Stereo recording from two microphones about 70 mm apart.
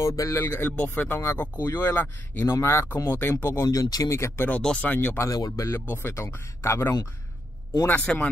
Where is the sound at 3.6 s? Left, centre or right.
Left.